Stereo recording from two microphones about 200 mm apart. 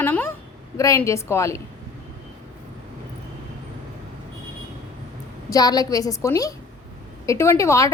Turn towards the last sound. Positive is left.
turn(degrees=15)  # may be behind; listen again after turning